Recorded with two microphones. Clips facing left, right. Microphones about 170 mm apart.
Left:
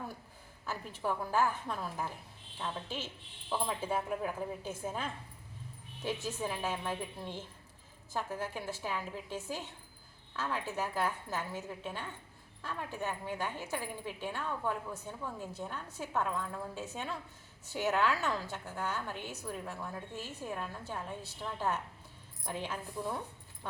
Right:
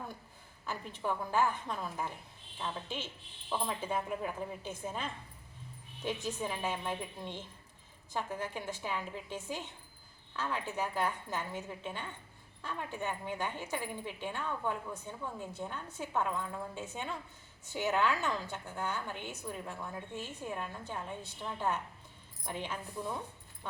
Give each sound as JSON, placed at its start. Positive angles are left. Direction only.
{"t": 0.6, "sound": "a woman's voice", "side_deg": 5}